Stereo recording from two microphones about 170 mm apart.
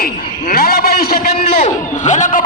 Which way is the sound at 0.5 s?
60° left (ahead or behind).